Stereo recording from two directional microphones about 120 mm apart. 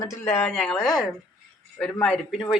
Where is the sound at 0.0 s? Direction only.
25° left (ahead or behind).